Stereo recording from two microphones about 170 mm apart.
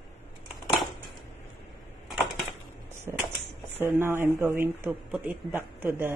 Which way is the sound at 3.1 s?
15° right (ahead or behind).